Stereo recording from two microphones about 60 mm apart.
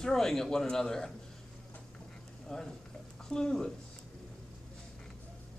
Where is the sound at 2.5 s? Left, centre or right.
Centre.